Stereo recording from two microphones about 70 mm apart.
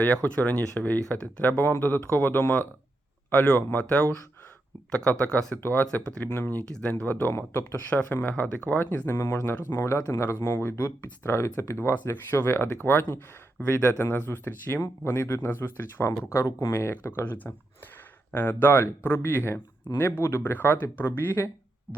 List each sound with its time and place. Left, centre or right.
0.0 s speech: left
5.5 s speech: left
6.1 s speech: centre
6.7 s speech: centre
6.9 s speech: left
9.6 s speech: left